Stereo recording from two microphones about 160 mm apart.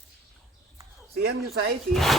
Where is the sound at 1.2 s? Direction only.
80° right.